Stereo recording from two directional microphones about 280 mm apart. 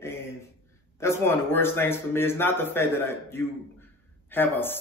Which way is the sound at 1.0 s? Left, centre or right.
Centre.